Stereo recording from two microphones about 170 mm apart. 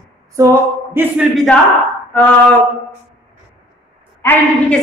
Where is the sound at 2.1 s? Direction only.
10° left (ahead or behind).